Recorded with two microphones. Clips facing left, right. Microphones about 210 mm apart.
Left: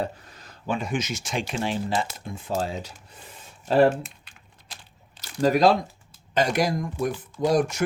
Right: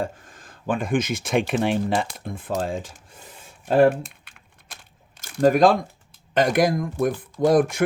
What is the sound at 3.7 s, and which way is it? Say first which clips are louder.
Typing: right 2 dB; 55° right (ahead or behind).